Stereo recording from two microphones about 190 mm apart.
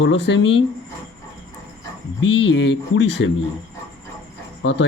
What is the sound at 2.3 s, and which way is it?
Speech, 75° left (ahead or behind).